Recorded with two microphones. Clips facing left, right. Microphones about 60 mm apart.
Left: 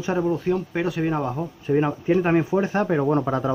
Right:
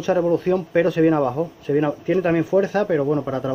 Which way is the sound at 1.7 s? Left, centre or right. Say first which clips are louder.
Right 1 dB; centre.